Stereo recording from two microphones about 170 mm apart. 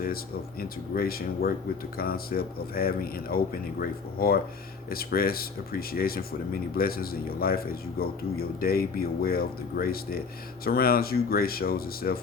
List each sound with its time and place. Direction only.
0.9 s speech: 60° left (ahead or behind)